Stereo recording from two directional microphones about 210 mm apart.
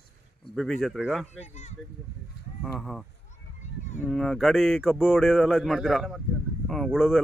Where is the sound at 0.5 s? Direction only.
Centre (ahead or behind).